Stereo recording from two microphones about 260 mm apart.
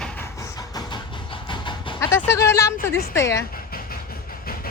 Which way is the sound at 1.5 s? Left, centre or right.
Centre.